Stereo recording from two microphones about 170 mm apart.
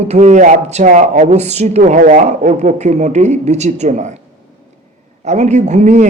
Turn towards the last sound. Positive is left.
turn(degrees=-45)  # may be behind; listen again after turning